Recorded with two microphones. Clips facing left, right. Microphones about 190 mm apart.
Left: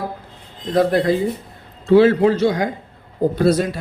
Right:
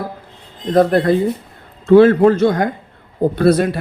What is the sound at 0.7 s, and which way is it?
A man's voice, 50° right (ahead or behind).